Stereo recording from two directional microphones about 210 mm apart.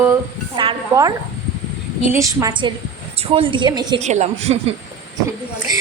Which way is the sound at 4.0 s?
30° right (ahead or behind).